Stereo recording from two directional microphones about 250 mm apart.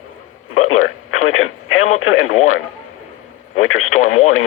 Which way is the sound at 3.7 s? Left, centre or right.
Left.